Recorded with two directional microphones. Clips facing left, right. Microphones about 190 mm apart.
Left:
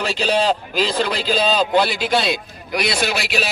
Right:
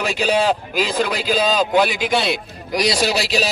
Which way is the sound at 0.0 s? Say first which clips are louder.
Right 1 dB; 10° right (ahead or behind).